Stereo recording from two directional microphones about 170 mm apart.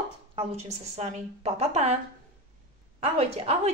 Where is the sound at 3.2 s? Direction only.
35° right (ahead or behind).